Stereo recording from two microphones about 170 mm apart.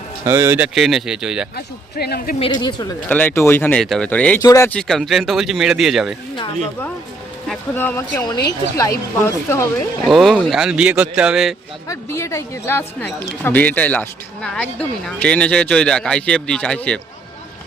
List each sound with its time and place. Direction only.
0.3 s speech: 15° right (ahead or behind)
1.5 s a man's voice: 65° left (ahead or behind)
2.4 s speech: 25° left (ahead or behind)
3.1 s speech: 10° left (ahead or behind)
4.4 s speech: 20° left (ahead or behind)
4.7 s speech: 5° left (ahead or behind)
7.4 s speech: centre (ahead or behind)
7.8 s speech: 10° left (ahead or behind)
8.3 s speech: 20° left (ahead or behind)
10.1 s speech: centre (ahead or behind)
11.9 s speech: 15° left (ahead or behind)